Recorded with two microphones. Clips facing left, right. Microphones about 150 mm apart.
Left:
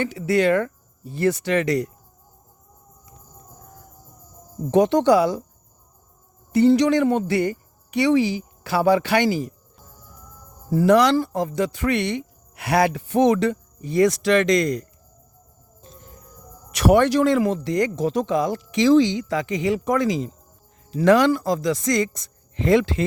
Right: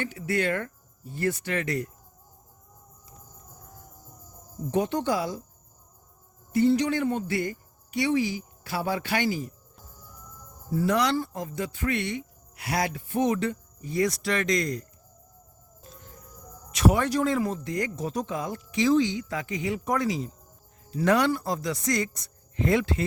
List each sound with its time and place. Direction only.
0.0 s speech: 90° left
4.7 s a man's voice: 90° left
6.5 s speech: 85° left
10.7 s a man's voice: 80° left
16.7 s speech: 75° left (ahead or behind); by 23.0 s 90° left